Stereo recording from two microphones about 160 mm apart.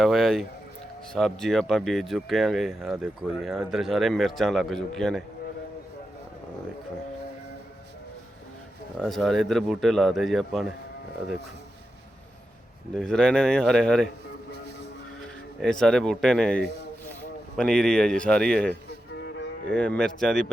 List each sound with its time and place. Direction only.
0.0 s speech: centre (ahead or behind)
9.0 s speech: centre (ahead or behind)
12.9 s speech: 5° left (ahead or behind)
15.6 s speech: 5° left (ahead or behind)
19.1 s cattle: 90° left
19.7 s speech: 5° left (ahead or behind)